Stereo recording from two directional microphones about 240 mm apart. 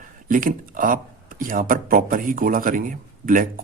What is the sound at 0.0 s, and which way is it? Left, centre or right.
Speech, right.